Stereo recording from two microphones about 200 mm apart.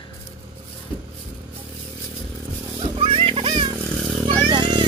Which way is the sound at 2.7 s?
25° right (ahead or behind).